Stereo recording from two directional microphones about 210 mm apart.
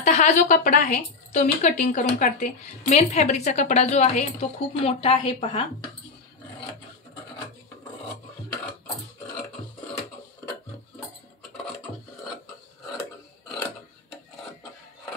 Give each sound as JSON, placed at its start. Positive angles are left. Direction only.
{"t": 0.0, "sound": "speech", "side_deg": 35}